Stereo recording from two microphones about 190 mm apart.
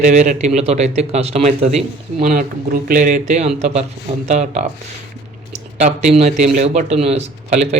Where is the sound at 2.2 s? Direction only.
45° right (ahead or behind).